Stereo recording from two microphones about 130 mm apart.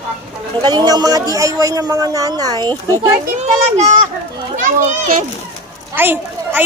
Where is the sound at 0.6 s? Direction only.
30° right (ahead or behind).